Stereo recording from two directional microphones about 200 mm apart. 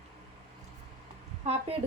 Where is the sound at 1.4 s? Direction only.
35° right (ahead or behind).